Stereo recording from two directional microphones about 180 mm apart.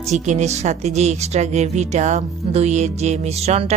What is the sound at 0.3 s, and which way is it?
Speech, 40° right (ahead or behind).